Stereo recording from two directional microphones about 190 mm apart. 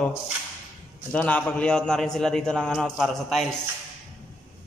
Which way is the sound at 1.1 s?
5° left (ahead or behind).